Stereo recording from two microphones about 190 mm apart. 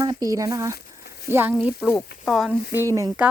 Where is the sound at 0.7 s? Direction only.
55° left (ahead or behind).